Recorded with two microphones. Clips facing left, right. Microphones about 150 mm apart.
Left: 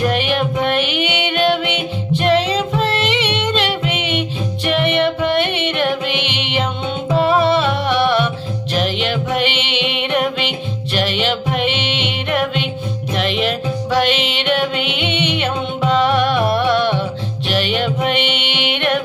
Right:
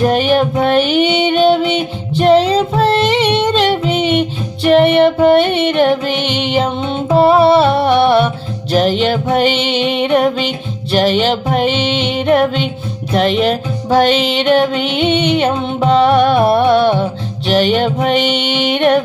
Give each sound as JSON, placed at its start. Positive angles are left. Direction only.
{"t": 0.0, "sound": "child singing", "side_deg": -40}
{"t": 8.7, "sound": "music", "side_deg": -40}